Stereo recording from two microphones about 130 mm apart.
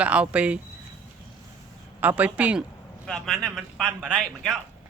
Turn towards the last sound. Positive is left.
turn(degrees=5)  # may be behind; listen again after turning